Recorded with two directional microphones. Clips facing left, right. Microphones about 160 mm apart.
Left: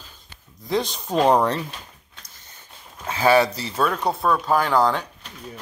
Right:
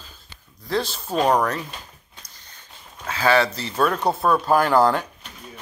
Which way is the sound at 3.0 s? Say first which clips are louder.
Left 2 dB; 15° left (ahead or behind).